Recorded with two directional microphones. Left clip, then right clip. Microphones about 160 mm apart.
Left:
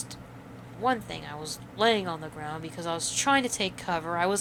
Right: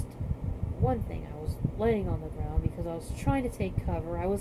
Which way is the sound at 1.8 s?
80° left.